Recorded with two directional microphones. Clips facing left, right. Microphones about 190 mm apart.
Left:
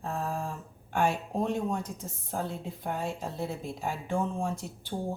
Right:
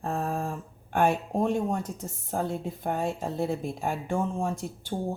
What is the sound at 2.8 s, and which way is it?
Speech, 50° right (ahead or behind).